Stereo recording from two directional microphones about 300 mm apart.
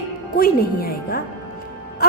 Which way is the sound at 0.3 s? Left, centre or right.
Left.